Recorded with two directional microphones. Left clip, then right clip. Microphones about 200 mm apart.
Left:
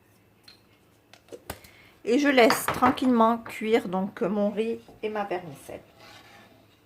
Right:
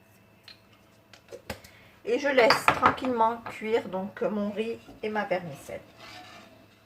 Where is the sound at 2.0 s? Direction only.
45° left (ahead or behind).